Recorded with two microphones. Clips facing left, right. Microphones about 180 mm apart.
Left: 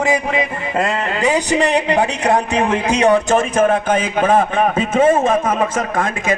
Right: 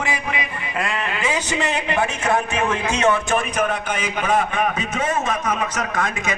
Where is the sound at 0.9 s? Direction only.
35° left (ahead or behind).